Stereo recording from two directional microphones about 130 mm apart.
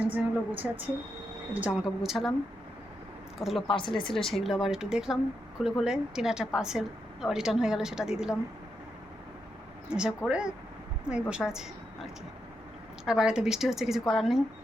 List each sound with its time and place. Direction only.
0.1 s a woman's voice: 15° right (ahead or behind)
3.3 s speech: centre (ahead or behind)
3.7 s speech: 40° left (ahead or behind)
4.4 s a woman's voice: 5° right (ahead or behind)
9.9 s a woman's voice: 5° right (ahead or behind)
13.1 s a woman's voice: 5° right (ahead or behind)